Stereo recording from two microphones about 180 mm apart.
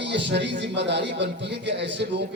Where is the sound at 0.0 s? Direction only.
75° right (ahead or behind).